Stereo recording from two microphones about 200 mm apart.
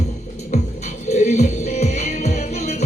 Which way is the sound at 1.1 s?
35° left (ahead or behind).